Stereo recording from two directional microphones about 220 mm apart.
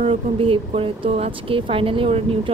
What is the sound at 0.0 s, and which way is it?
Speech, 25° right (ahead or behind).